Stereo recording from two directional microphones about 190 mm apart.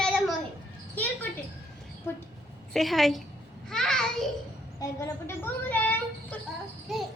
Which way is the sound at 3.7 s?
5° left (ahead or behind).